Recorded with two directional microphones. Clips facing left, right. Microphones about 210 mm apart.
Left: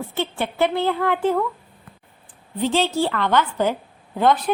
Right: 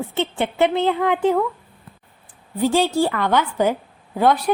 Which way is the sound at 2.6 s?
10° right (ahead or behind).